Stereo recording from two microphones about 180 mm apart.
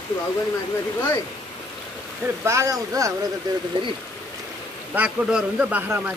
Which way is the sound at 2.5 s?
15° right (ahead or behind).